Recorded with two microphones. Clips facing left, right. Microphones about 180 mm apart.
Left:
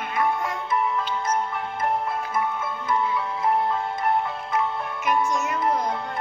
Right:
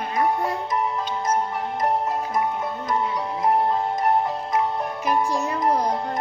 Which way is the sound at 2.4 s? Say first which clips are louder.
Right 2 dB; 40° right (ahead or behind).